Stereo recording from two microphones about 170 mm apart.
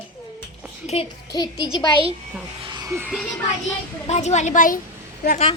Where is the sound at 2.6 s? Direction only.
25° right (ahead or behind).